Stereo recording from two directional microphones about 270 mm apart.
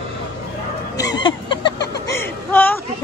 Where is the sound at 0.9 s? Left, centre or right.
Centre.